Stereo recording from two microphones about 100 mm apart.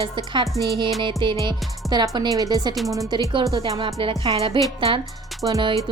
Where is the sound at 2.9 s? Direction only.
35° right (ahead or behind).